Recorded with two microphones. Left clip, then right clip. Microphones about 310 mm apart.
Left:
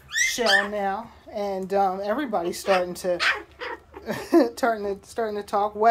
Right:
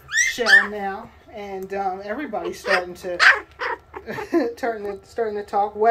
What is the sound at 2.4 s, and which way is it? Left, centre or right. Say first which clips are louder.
Speech: right 3 dB; centre.